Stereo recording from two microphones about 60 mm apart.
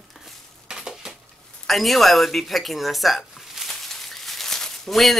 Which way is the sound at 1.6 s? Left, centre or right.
Centre.